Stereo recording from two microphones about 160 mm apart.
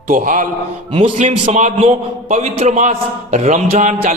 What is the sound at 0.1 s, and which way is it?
Speech, 55° right (ahead or behind).